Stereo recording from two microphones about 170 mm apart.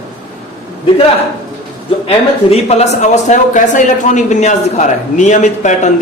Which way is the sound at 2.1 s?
35° left (ahead or behind).